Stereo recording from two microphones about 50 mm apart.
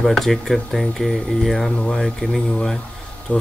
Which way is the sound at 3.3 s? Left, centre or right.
Left.